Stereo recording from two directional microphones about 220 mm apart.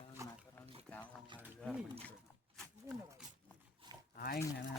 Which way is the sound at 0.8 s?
5° left (ahead or behind).